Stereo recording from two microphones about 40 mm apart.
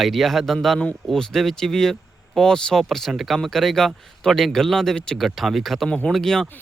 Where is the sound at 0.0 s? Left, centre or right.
Centre.